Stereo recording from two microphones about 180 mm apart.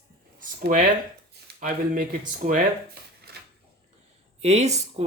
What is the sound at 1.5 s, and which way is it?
Speech, 50° right (ahead or behind).